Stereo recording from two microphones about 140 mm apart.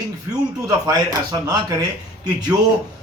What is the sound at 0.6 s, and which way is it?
Speech, 25° right (ahead or behind).